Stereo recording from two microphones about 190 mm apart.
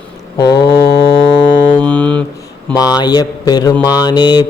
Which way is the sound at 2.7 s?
20° left (ahead or behind).